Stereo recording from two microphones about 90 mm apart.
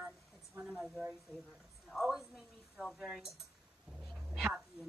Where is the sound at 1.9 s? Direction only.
Centre (ahead or behind).